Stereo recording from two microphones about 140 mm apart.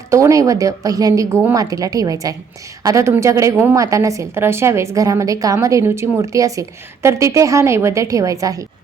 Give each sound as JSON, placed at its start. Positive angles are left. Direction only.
{"t": 0.1, "sound": "a woman's voice", "side_deg": -20}